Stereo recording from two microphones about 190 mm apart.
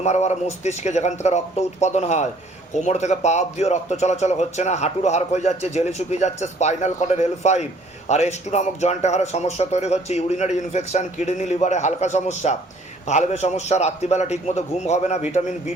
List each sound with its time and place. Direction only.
0.0 s speech: 35° left (ahead or behind)